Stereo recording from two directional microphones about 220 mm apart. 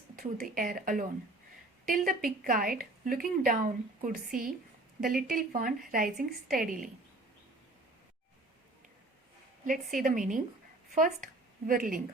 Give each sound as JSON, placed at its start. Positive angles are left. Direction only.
{"t": 0.2, "sound": "a woman's voice", "side_deg": -40}
{"t": 9.6, "sound": "a woman's voice", "side_deg": -40}